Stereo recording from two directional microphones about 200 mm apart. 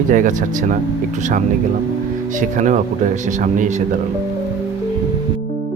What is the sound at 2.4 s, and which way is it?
Speech, 40° right (ahead or behind).